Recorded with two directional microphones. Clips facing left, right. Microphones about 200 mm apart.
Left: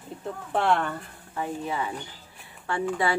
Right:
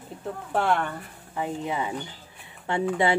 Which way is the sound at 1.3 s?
20° right (ahead or behind).